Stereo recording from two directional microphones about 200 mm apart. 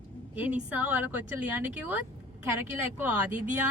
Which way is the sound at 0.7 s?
10° right (ahead or behind).